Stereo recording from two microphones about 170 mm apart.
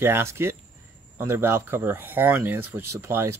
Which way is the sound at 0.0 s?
15° right (ahead or behind).